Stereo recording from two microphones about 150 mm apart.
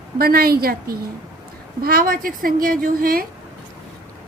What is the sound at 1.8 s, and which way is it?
A woman's voice, 75° right (ahead or behind).